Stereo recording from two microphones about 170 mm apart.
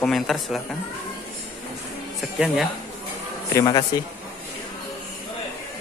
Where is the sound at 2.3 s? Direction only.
Centre (ahead or behind).